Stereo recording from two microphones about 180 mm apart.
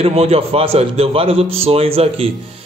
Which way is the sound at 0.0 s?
35° right (ahead or behind).